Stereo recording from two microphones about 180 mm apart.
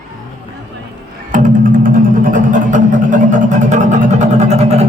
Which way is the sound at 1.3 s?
45° right (ahead or behind).